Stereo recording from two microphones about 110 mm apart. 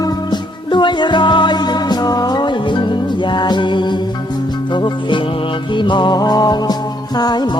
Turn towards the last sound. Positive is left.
turn(degrees=40)  # may be behind; listen again after turning